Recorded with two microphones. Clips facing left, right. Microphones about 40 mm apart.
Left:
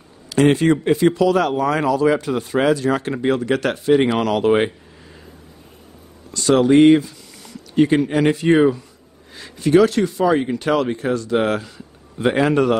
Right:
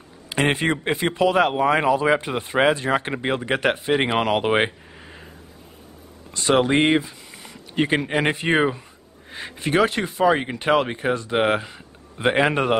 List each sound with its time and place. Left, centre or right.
0.3 s a man's voice: right
6.3 s a man's voice: right